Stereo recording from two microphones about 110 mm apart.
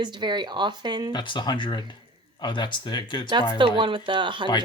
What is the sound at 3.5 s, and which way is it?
Speech, 50° right (ahead or behind).